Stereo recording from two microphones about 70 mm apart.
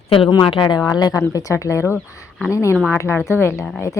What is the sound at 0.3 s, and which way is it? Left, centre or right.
Speech, left.